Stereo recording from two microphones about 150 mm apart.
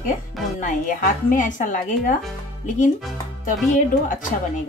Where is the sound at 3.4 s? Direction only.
65° left (ahead or behind).